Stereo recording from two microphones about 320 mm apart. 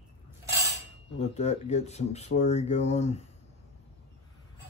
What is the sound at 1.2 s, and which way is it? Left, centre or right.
Speech, left.